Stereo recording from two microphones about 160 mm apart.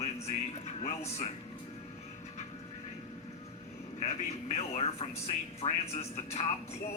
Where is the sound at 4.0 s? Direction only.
45° left (ahead or behind).